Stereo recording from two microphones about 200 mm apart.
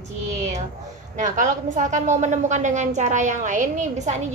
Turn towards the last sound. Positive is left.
turn(degrees=-35)  # may be behind; listen again after turning